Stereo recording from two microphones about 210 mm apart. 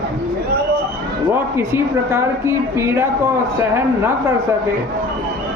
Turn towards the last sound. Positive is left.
turn(degrees=-10)  # may be behind; listen again after turning